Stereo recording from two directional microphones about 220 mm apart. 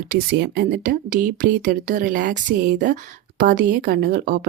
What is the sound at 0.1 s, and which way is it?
Speech, 45° right (ahead or behind).